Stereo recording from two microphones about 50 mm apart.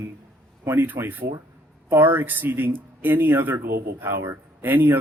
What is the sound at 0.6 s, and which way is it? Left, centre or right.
Speech, right.